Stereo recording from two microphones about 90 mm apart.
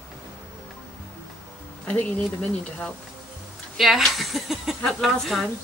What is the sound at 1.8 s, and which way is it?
Speech, 15° left (ahead or behind).